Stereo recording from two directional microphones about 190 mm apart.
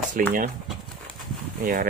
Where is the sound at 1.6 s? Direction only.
45° right (ahead or behind).